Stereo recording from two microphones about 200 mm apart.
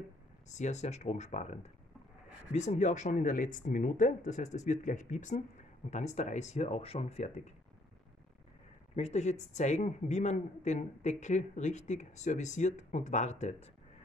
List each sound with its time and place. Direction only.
0.5 s speech: 35° left (ahead or behind)
8.9 s speech: 35° left (ahead or behind)